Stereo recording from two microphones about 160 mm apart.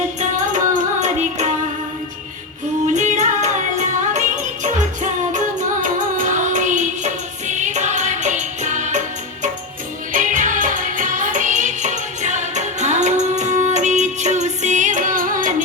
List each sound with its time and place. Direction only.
0.7 s music: 45° right (ahead or behind)
2.8 s music: 50° right (ahead or behind)
5.3 s music: 50° right (ahead or behind)